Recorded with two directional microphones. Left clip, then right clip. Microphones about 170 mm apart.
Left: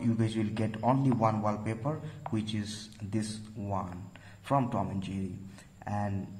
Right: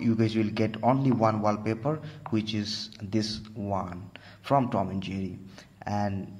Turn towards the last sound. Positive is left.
turn(degrees=-25)  # may be behind; listen again after turning